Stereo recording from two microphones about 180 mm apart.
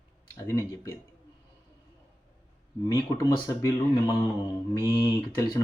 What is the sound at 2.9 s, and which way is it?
Speech, 15° left (ahead or behind).